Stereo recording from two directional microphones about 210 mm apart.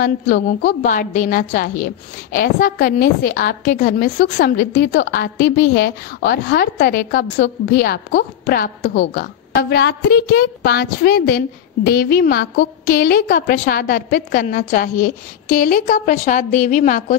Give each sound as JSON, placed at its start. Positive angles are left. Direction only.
{"t": 0.0, "sound": "a woman's voice", "side_deg": 40}